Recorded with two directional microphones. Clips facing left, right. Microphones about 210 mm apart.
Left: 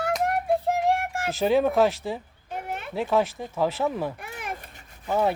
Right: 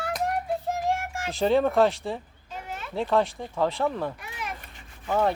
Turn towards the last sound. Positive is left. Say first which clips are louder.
# left 1 dB
turn(degrees=10)  # may be behind; listen again after turning